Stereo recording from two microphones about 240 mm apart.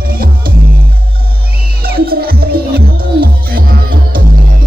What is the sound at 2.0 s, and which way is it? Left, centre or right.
Music, right.